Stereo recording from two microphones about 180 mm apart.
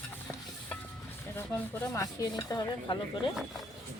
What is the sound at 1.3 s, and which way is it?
Stir, 10° left (ahead or behind).